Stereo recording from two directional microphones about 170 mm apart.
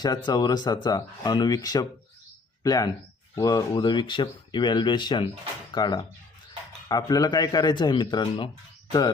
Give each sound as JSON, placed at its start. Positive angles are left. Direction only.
{"t": 0.3, "sound": "speech", "side_deg": 25}